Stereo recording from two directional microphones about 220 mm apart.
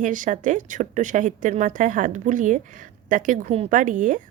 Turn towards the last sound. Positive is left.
turn(degrees=-35)  # may be behind; listen again after turning